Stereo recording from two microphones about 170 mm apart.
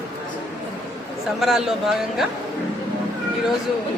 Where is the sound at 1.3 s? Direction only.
Centre (ahead or behind).